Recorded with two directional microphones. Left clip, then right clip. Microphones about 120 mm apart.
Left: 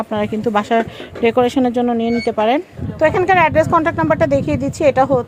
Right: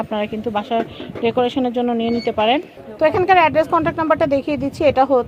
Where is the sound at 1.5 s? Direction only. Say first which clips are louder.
Left 3 dB; 80° left.